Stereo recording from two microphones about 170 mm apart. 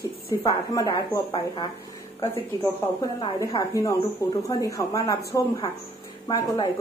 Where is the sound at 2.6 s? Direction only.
20° left (ahead or behind).